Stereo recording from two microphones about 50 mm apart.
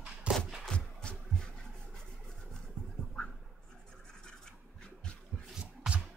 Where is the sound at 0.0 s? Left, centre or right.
Right.